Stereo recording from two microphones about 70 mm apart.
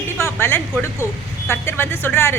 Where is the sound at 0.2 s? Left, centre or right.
Left.